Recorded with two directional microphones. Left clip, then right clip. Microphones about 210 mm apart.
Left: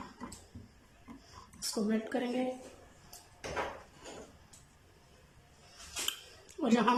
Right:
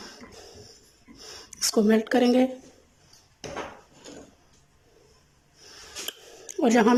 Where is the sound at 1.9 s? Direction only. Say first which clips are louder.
Right 14 dB; 50° right (ahead or behind).